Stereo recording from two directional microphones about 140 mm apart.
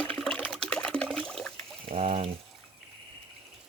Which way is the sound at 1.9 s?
50° right (ahead or behind).